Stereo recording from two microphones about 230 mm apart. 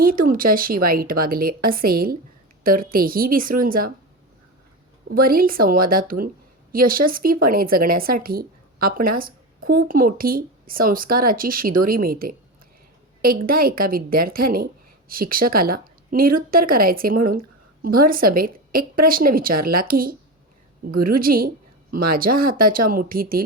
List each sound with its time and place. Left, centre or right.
0.0 s a woman's voice: right
5.0 s a woman's voice: right